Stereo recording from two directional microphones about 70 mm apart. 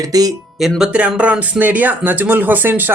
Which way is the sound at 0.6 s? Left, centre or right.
Centre.